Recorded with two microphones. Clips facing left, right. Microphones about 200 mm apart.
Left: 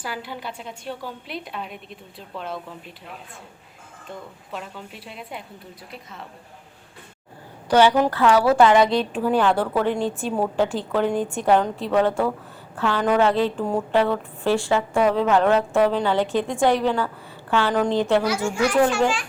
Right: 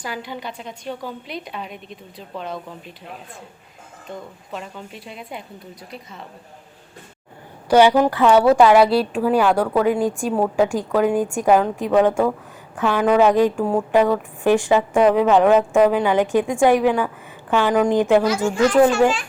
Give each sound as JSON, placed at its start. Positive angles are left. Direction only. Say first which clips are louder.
{"t": 0.0, "sound": "a woman's voice", "louder": "right 2 dB", "side_deg": 5}
{"t": 4.5, "sound": "a woman's voice", "louder": "right 2 dB", "side_deg": 0}
{"t": 7.7, "sound": "a woman's voice", "louder": "right 3 dB", "side_deg": -15}
{"t": 8.5, "sound": "speech", "louder": "right 3 dB", "side_deg": -5}